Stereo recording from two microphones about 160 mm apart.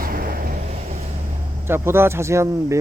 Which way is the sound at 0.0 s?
65° right (ahead or behind).